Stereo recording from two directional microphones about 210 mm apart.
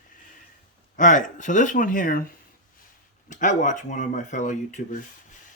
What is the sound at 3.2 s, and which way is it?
Speech, 35° left (ahead or behind).